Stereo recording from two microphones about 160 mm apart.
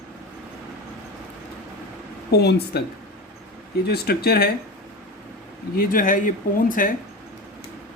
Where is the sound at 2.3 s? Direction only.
85° left.